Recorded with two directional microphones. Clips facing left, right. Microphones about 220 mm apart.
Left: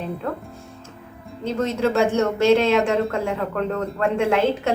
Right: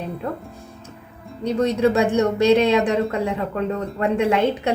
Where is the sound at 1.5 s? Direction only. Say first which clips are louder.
Right 3 dB; 15° right (ahead or behind).